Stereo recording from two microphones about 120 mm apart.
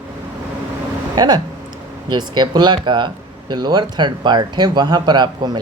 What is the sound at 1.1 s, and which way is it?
Speech, 35° right (ahead or behind).